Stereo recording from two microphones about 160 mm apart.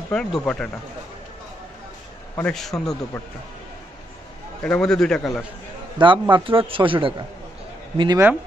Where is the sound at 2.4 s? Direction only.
Centre (ahead or behind).